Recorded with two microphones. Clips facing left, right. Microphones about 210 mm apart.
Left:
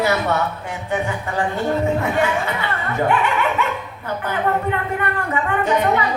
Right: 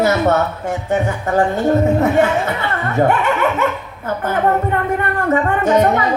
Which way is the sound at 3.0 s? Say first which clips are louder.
Right 2 dB; 45° right (ahead or behind).